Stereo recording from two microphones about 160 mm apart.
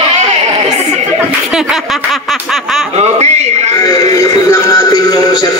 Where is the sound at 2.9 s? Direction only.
40° right (ahead or behind).